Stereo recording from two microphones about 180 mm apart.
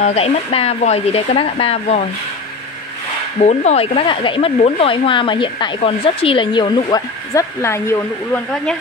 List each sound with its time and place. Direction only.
0.0 s speech: 35° left (ahead or behind)
3.3 s speech: 35° left (ahead or behind); by 8.7 s 10° left (ahead or behind)